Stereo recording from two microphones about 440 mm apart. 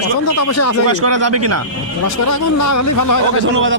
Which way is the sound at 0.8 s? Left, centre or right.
Right.